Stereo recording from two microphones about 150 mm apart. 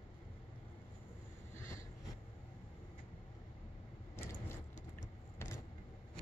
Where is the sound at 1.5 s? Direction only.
20° left (ahead or behind).